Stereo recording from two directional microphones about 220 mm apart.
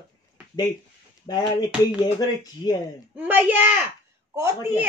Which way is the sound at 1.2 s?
15° left (ahead or behind).